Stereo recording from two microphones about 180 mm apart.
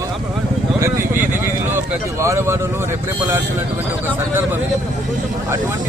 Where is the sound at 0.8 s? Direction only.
15° right (ahead or behind).